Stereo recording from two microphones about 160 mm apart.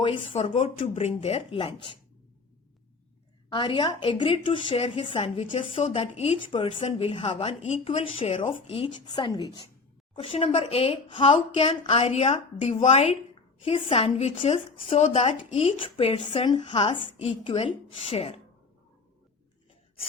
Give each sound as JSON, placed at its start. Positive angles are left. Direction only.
{"t": 0.0, "sound": "a woman's voice", "side_deg": 35}
{"t": 3.5, "sound": "a woman's voice", "side_deg": 30}
{"t": 10.2, "sound": "a woman's voice", "side_deg": 40}